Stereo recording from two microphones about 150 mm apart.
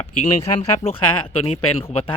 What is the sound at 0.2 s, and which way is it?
Speech, 45° left (ahead or behind).